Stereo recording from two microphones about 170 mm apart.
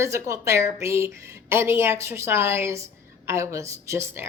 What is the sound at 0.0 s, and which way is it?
A woman's voice, 15° right (ahead or behind).